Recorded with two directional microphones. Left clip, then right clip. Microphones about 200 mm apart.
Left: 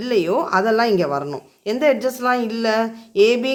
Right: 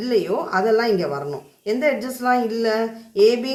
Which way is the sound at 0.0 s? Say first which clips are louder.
Left 2 dB; 45° left (ahead or behind).